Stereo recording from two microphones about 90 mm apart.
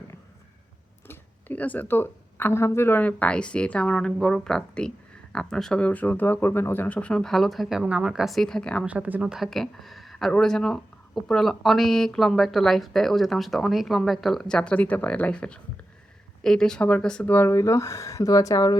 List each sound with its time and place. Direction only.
1.0 s speech: 20° left (ahead or behind); by 5.8 s 5° left (ahead or behind)
5.8 s speech: 15° left (ahead or behind)
8.8 s speech: 15° right (ahead or behind)
9.3 s speech: centre (ahead or behind)
17.3 s speech: 25° left (ahead or behind); by 18.8 s 45° left (ahead or behind)